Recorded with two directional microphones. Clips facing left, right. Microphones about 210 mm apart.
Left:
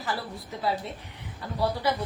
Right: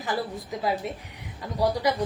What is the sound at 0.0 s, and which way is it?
Speech, 15° right (ahead or behind).